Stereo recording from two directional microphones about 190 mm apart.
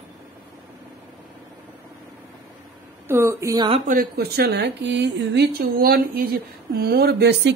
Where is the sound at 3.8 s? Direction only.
50° right (ahead or behind).